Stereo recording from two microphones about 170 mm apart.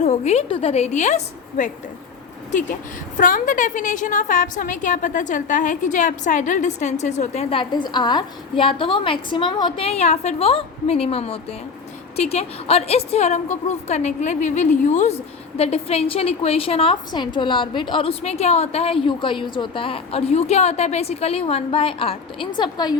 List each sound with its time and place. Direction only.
0.0 s a woman's voice: 40° left (ahead or behind)
3.2 s a woman's voice: 50° left (ahead or behind)
7.6 s a woman's voice: 25° left (ahead or behind)